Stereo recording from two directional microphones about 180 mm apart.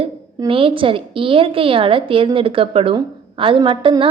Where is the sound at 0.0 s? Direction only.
30° right (ahead or behind).